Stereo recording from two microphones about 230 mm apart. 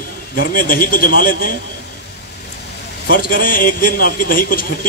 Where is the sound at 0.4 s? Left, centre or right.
Left.